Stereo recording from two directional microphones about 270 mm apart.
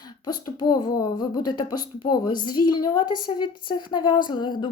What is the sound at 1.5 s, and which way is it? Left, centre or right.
Speech, centre.